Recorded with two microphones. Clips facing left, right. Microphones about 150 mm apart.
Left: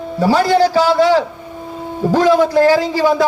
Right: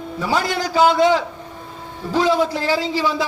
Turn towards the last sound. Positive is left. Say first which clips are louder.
# left 7 dB
turn(degrees=50)  # may be behind; listen again after turning